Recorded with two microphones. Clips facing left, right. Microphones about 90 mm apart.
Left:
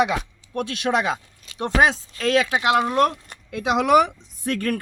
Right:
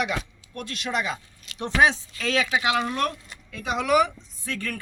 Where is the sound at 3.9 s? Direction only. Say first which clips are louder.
Left 3 dB; 60° left (ahead or behind).